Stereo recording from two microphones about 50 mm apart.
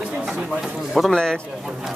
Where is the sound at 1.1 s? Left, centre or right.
Centre.